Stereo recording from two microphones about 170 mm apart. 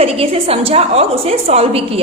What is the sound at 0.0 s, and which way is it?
A woman's voice, 35° right (ahead or behind).